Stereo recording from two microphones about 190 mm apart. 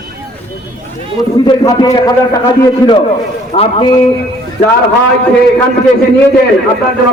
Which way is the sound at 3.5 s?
35° left (ahead or behind).